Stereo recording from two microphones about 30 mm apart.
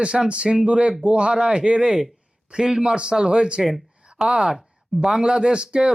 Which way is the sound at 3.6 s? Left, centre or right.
Centre.